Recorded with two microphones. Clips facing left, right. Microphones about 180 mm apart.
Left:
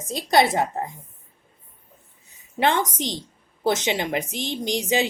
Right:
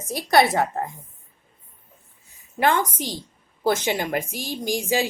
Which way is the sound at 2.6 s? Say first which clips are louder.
Even; 25° left (ahead or behind).